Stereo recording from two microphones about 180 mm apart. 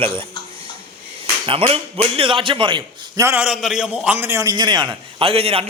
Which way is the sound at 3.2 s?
10° right (ahead or behind).